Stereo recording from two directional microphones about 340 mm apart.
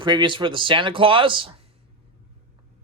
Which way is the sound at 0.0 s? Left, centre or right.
Centre.